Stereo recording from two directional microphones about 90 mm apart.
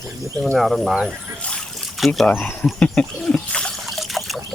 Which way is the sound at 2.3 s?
20° left (ahead or behind).